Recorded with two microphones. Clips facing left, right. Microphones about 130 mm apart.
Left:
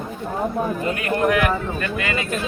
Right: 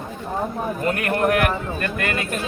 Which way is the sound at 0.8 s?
55° right (ahead or behind).